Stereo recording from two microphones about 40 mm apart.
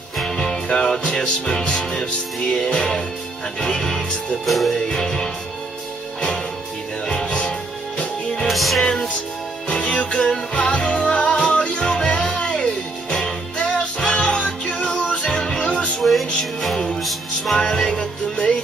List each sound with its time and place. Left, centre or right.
0.2 s music: centre
4.5 s music: centre
4.7 s music: centre
7.1 s music: left
8.5 s music: centre
8.8 s music: centre
16.0 s music: centre
16.7 s music: centre
17.0 s music: centre
17.6 s music: centre